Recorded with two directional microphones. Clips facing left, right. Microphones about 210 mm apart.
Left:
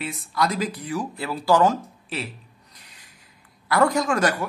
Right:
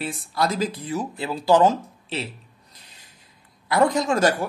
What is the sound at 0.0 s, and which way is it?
Speech, 30° right (ahead or behind).